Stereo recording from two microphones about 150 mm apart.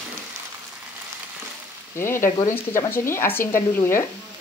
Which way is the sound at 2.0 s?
15° left (ahead or behind).